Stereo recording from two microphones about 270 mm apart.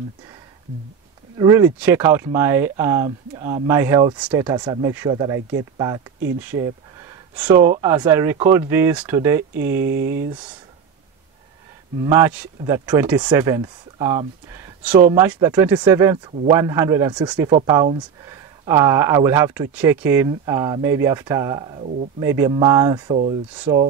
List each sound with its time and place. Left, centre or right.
1.4 s speech: centre
6.4 s speech: centre
9.8 s speech: right
12.1 s speech: centre